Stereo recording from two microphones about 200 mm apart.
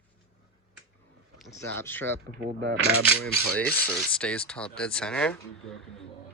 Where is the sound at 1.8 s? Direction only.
10° left (ahead or behind).